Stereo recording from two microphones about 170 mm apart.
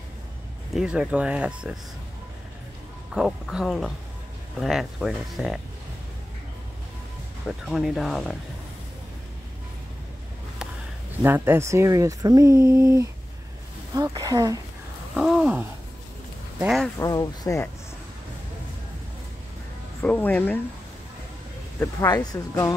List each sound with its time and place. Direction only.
0.7 s speech: 5° right (ahead or behind)
3.2 s speech: centre (ahead or behind)
7.4 s speech: centre (ahead or behind)
11.2 s speech: 15° right (ahead or behind)
15.1 s speech: 5° right (ahead or behind)
17.0 s speech: 20° left (ahead or behind)
20.0 s speech: 10° left (ahead or behind)
21.7 s speech: 20° left (ahead or behind)